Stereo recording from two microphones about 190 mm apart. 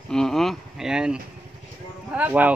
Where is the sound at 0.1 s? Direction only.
Centre (ahead or behind).